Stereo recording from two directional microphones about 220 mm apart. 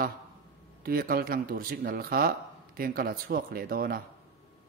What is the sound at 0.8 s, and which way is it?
Speech, 40° right (ahead or behind).